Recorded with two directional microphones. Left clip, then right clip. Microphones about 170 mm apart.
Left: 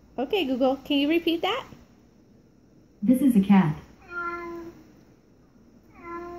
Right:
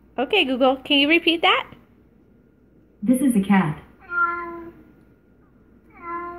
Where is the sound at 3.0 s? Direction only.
15° left (ahead or behind).